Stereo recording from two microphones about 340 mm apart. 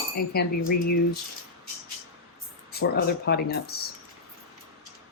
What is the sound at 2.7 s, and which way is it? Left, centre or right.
Speech, left.